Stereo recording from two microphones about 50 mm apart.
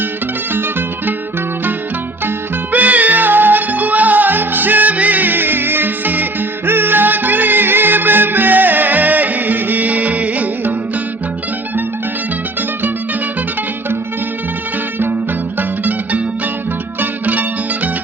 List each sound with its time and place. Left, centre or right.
2.7 s music: right
15.5 s music: right